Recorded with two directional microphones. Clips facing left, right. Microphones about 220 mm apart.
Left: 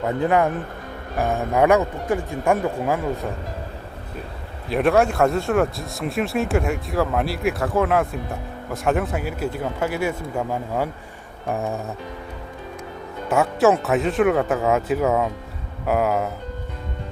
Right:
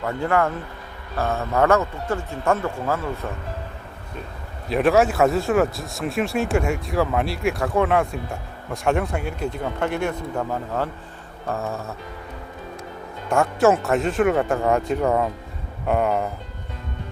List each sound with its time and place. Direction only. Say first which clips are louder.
0.0 s speech: left 2 dB; 20° left (ahead or behind)
4.7 s speech: even; centre (ahead or behind); by 11.8 s 15° left (ahead or behind)
13.3 s speech: even; 5° left (ahead or behind)